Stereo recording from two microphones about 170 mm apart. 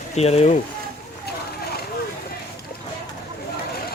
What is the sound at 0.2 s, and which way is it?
Speech, 40° left (ahead or behind).